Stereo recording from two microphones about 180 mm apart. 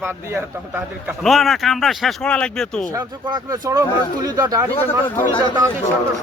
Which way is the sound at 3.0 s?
20° right (ahead or behind).